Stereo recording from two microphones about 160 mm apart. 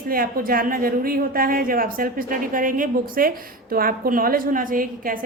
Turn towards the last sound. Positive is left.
turn(degrees=-60)  # may be behind; listen again after turning